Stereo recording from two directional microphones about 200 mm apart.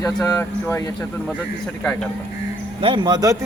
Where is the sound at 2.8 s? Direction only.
25° right (ahead or behind).